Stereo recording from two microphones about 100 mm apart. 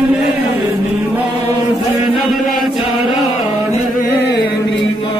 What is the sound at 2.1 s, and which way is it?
Chant, centre (ahead or behind).